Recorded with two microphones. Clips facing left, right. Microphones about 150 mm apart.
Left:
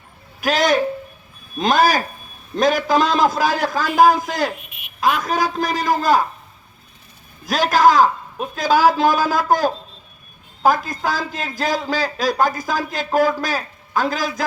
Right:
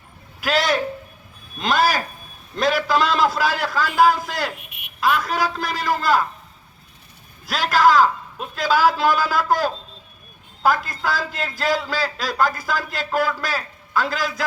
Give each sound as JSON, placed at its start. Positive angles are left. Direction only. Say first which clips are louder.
{"t": 0.4, "sound": "a woman's voice", "louder": "left 3 dB", "side_deg": 45}
{"t": 7.4, "sound": "a man's voice", "louder": "left 3 dB", "side_deg": 45}